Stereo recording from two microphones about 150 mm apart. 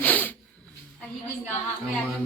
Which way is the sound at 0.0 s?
10° left (ahead or behind).